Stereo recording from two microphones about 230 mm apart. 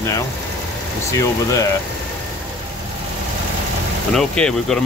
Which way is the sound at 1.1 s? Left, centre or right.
Centre.